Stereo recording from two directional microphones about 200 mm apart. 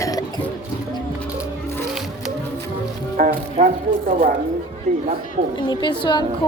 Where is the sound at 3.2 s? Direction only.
40° right (ahead or behind).